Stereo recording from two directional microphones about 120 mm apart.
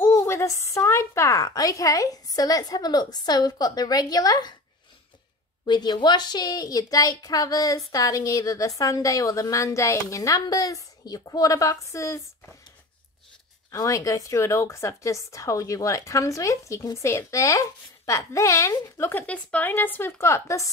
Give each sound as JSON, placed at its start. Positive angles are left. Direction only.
{"t": 0.0, "sound": "a woman's voice", "side_deg": 20}
{"t": 5.7, "sound": "a woman's voice", "side_deg": 35}
{"t": 13.7, "sound": "a woman's voice", "side_deg": 25}